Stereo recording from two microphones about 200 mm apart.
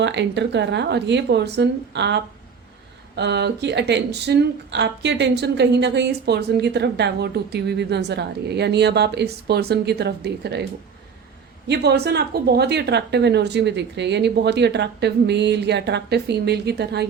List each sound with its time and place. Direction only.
0.0 s speech: 60° right (ahead or behind)
11.7 s speech: 55° right (ahead or behind)